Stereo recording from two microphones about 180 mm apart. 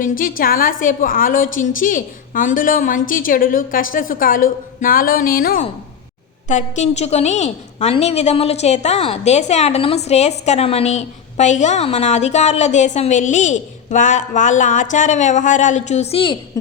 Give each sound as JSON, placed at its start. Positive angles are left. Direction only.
{"t": 0.0, "sound": "a woman's voice", "side_deg": 50}
{"t": 6.5, "sound": "a woman's voice", "side_deg": 40}